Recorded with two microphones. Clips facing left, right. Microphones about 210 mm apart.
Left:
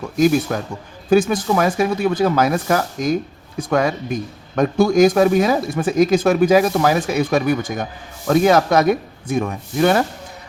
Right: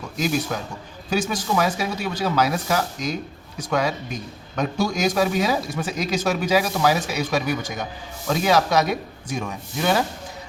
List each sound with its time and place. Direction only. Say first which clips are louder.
0.2 s a man's voice: left 8 dB; 50° left (ahead or behind)